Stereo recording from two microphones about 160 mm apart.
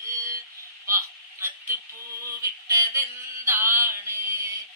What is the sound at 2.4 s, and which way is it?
Mantra, 20° right (ahead or behind).